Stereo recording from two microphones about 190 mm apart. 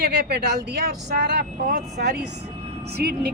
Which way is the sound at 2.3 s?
35° right (ahead or behind).